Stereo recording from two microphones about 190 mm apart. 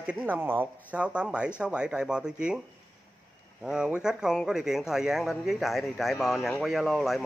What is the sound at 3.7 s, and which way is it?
Speech, 5° right (ahead or behind).